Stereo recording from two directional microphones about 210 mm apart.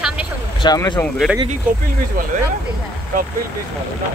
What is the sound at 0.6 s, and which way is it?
Speech, 20° left (ahead or behind).